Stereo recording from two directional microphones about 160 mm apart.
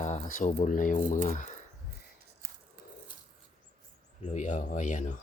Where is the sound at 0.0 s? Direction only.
45° left (ahead or behind).